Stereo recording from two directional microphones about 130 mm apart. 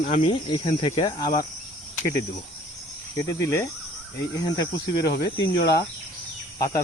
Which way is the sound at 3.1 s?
25° left (ahead or behind).